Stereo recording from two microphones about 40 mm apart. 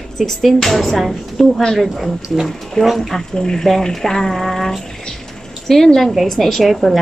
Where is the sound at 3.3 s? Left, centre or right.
Centre.